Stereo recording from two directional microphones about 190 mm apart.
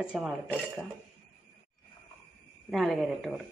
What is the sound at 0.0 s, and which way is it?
Speech, 5° right (ahead or behind).